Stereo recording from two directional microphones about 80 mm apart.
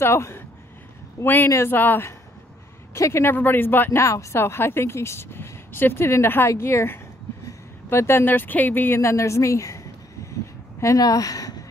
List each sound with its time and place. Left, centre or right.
0.0 s a woman's voice: left
4.0 s a woman's voice: left
10.3 s a sound: left
11.0 s speech: left